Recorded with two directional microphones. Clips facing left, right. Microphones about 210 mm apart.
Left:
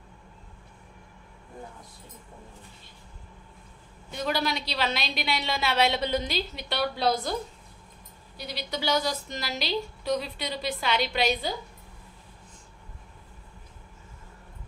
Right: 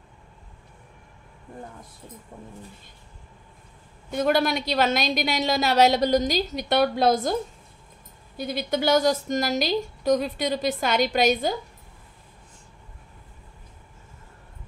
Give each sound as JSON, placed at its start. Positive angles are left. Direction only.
{"t": 4.1, "sound": "a woman's voice", "side_deg": -50}
{"t": 8.4, "sound": "a woman's voice", "side_deg": -50}